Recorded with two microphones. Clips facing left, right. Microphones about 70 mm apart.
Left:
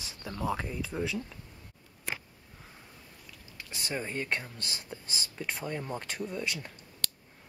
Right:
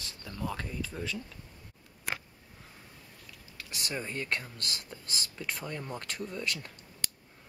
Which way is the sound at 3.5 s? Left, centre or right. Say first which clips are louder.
Left 1 dB; centre.